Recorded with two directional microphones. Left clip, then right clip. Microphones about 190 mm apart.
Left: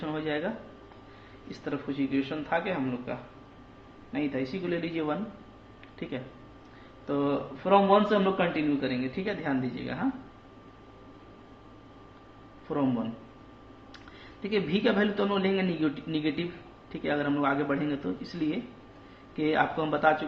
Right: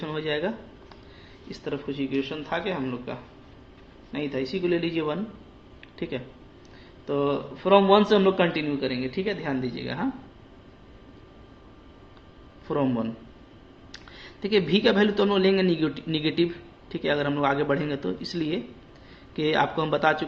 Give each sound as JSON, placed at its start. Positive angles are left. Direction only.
{"t": 0.0, "sound": "speech", "side_deg": -40}
{"t": 1.5, "sound": "a man's voice", "side_deg": -25}
{"t": 7.1, "sound": "a man's voice", "side_deg": -25}
{"t": 8.8, "sound": "speech", "side_deg": -25}
{"t": 12.6, "sound": "a man's voice", "side_deg": -45}
{"t": 14.4, "sound": "a man's voice", "side_deg": -40}